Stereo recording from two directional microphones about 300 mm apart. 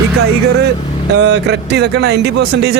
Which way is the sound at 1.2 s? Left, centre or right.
Right.